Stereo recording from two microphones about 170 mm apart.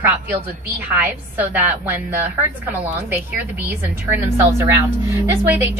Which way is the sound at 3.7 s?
15° right (ahead or behind).